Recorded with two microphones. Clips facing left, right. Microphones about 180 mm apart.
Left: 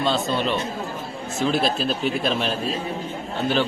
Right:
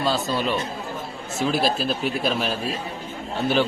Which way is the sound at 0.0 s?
Centre (ahead or behind).